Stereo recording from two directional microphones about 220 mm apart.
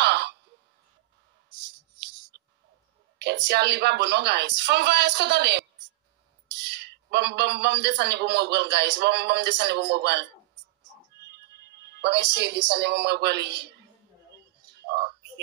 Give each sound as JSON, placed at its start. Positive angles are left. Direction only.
{"t": 0.0, "sound": "a sound", "side_deg": -50}
{"t": 2.3, "sound": "bird", "side_deg": -50}
{"t": 3.2, "sound": "a man's voice", "side_deg": -50}
{"t": 11.7, "sound": "a man's voice", "side_deg": -50}
{"t": 14.8, "sound": "frog", "side_deg": -50}